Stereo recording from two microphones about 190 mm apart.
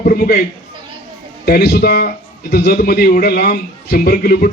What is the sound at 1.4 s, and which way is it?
A man's voice, 55° left (ahead or behind).